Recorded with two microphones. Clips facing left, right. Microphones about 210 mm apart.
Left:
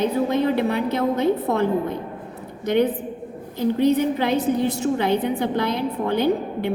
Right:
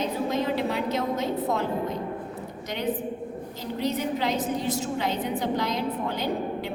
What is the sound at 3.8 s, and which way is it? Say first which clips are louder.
A woman's voice: left 7 dB; 55° left (ahead or behind).